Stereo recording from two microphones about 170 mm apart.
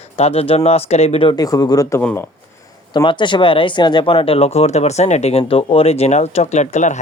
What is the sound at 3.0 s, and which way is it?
Speech, 30° left (ahead or behind).